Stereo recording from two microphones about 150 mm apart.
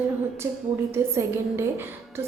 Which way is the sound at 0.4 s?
20° right (ahead or behind).